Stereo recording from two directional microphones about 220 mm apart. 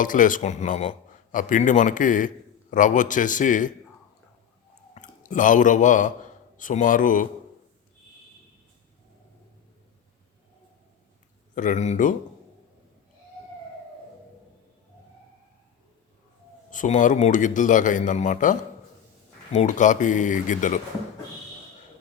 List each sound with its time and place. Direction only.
0.0 s a man's voice: 35° left (ahead or behind)
4.9 s a man's voice: 35° left (ahead or behind)
11.5 s a man's voice: 35° left (ahead or behind)
16.7 s a man's voice: 35° left (ahead or behind)